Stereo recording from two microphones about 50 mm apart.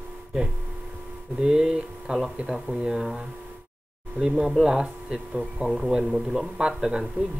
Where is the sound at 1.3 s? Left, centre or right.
Centre.